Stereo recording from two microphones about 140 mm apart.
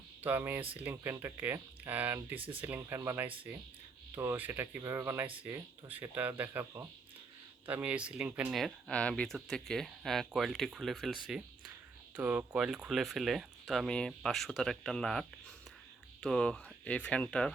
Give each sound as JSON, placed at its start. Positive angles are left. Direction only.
{"t": 0.2, "sound": "speech", "side_deg": -15}